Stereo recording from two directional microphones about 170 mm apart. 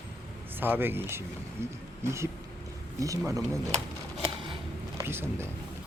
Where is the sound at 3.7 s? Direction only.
35° right (ahead or behind).